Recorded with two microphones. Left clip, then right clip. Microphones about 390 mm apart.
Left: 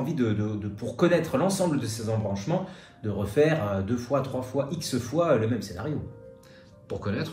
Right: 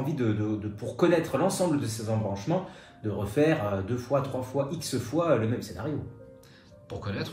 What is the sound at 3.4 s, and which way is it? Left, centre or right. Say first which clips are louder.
Speech: left 2 dB; centre.